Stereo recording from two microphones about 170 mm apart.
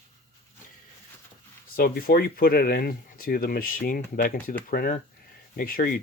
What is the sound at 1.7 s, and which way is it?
Speech, 60° left (ahead or behind).